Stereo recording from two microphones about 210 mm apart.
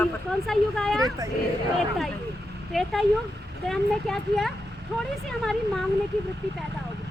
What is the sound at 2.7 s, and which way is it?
Speech, centre (ahead or behind).